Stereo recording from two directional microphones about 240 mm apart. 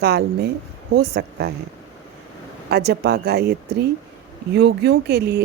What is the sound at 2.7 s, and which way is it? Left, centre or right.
Speech, right.